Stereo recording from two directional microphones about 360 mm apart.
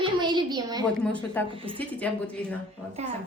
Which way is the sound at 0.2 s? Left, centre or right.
Centre.